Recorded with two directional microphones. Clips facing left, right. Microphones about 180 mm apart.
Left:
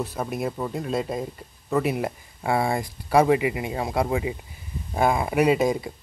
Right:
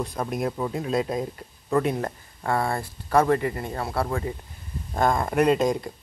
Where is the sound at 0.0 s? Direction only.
5° left (ahead or behind).